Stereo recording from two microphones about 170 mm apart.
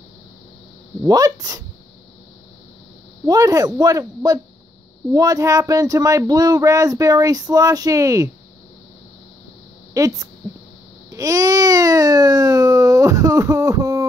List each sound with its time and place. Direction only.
1.0 s speech: 20° right (ahead or behind)
3.3 s speech: 20° right (ahead or behind)
9.9 s speech: 20° right (ahead or behind)
11.1 s baby cry: 20° right (ahead or behind)